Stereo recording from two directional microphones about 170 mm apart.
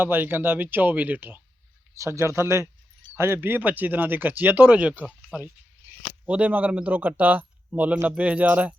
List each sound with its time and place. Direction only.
0.0 s speech: 10° right (ahead or behind)